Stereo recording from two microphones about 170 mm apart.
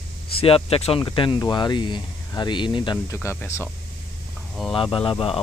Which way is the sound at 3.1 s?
15° left (ahead or behind).